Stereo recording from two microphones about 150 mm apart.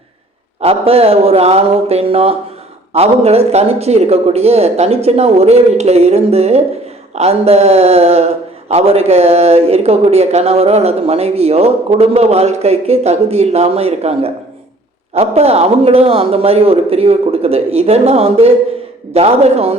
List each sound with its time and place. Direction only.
0.6 s a man's voice: 40° right (ahead or behind)